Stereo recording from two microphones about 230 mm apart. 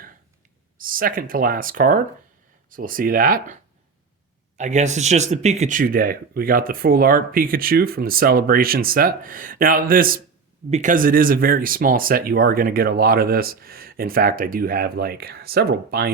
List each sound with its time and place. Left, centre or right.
0.8 s speech: right